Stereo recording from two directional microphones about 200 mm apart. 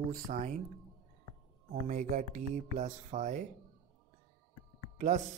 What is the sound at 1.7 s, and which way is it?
Speech, 40° right (ahead or behind).